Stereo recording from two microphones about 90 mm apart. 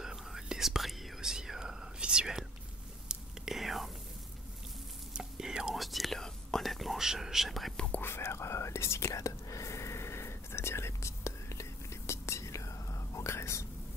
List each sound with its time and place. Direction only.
0.0 s whispering: 5° right (ahead or behind)
5.1 s whispering: 10° right (ahead or behind)
7.7 s whispering: 10° left (ahead or behind)
8.0 s whispering: 25° left (ahead or behind)